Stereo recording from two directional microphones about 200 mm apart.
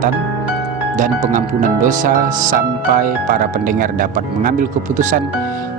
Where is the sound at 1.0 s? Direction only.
40° right (ahead or behind).